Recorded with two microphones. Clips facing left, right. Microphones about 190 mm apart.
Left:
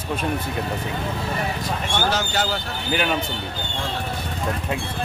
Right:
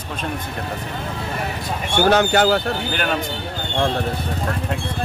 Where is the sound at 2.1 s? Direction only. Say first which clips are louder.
Right 9 dB; 60° right (ahead or behind).